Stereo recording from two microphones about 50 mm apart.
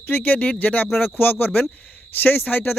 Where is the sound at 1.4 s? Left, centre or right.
Left.